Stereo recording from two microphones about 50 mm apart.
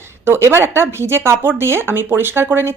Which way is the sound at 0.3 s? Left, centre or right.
Right.